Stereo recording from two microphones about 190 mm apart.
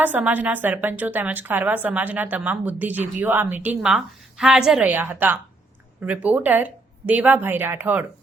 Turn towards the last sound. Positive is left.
turn(degrees=-10)  # may be behind; listen again after turning